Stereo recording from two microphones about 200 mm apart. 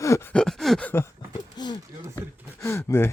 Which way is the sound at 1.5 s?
20° left (ahead or behind).